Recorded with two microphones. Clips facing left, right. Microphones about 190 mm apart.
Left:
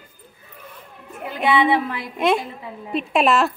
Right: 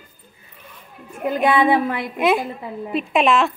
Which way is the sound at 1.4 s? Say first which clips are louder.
Right 1 dB; 45° right (ahead or behind).